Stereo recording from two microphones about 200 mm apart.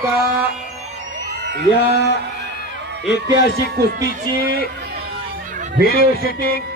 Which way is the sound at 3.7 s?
50° right (ahead or behind).